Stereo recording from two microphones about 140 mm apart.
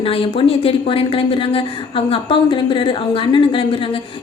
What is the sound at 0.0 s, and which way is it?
A woman's voice, 40° left (ahead or behind).